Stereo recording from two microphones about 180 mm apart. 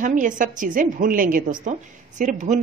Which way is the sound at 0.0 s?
45° right (ahead or behind).